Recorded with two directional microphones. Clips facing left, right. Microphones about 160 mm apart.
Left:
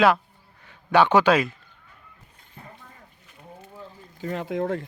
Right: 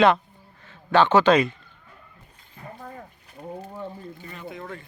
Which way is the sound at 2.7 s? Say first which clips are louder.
Right 10 dB; 45° right (ahead or behind).